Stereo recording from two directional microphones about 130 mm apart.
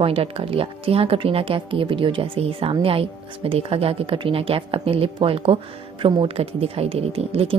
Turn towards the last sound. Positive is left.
turn(degrees=-50)  # may be behind; listen again after turning